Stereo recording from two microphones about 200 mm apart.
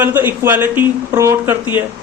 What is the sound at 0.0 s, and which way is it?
A man's voice, 10° right (ahead or behind).